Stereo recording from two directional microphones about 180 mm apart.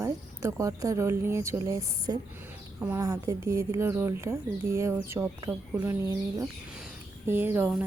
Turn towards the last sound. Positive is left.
turn(degrees=-10)  # may be behind; listen again after turning